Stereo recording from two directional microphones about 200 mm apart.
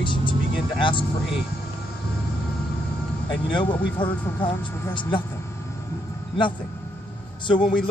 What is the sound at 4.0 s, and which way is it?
Speech, 25° left (ahead or behind).